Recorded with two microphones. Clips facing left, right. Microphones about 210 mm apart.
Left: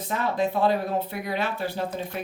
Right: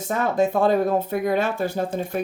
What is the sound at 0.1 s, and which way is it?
A man's voice, 50° right (ahead or behind).